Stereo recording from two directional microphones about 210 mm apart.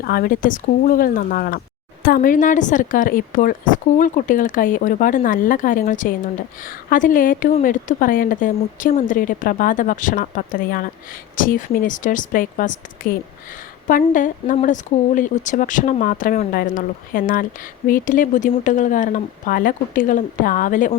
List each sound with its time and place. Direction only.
0.0 s a woman's voice: 45° left (ahead or behind)